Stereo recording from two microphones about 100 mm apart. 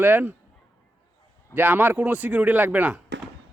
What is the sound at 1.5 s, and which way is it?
Speech, 20° right (ahead or behind).